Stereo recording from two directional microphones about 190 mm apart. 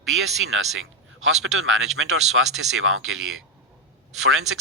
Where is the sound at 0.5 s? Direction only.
90° right.